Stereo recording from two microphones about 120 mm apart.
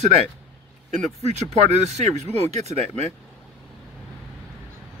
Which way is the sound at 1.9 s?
70° right (ahead or behind).